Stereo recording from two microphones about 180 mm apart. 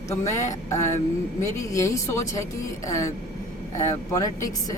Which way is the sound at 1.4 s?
15° left (ahead or behind).